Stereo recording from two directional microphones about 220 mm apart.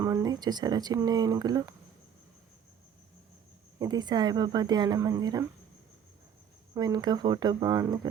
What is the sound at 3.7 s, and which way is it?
Speech, 20° right (ahead or behind).